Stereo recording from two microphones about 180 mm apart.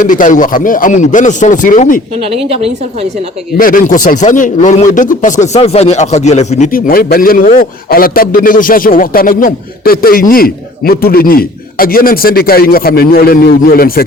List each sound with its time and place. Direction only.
0.0 s a man's voice: 45° left (ahead or behind)
3.6 s a man's voice: 50° left (ahead or behind)